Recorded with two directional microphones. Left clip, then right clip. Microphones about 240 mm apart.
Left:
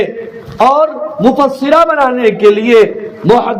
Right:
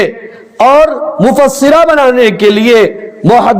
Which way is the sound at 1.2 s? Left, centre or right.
Right.